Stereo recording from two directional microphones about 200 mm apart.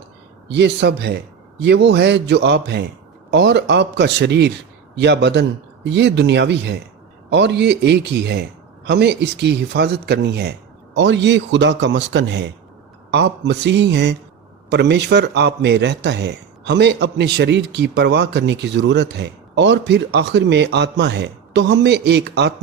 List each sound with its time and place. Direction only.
0.4 s a man's voice: 60° right (ahead or behind)